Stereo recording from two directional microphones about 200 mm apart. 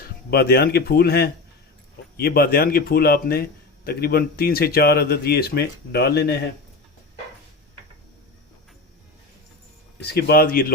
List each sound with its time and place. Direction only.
0.3 s a man's voice: 50° left (ahead or behind)
10.0 s a man's voice: 50° left (ahead or behind)